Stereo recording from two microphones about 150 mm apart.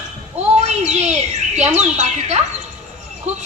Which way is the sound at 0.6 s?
50° right (ahead or behind).